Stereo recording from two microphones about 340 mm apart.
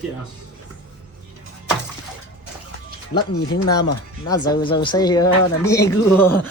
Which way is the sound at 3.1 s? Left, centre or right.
Centre.